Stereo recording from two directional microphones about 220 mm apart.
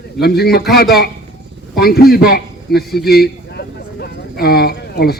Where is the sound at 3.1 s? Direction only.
45° left (ahead or behind).